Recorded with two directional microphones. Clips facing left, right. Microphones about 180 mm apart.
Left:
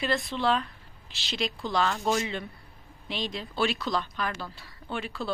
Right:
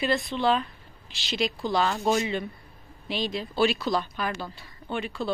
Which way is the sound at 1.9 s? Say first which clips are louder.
Right 3 dB; 15° right (ahead or behind).